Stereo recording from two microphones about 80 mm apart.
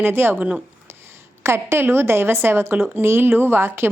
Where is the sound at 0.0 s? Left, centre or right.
Right.